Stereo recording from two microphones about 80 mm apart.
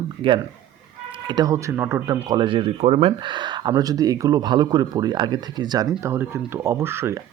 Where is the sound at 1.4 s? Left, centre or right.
Right.